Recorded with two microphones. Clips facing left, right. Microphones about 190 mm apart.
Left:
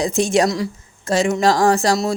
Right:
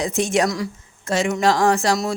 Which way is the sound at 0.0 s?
35° left (ahead or behind).